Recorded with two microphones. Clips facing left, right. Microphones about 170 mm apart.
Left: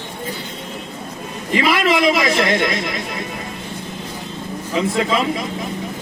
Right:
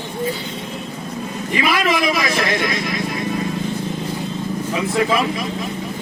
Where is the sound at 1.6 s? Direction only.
25° left (ahead or behind).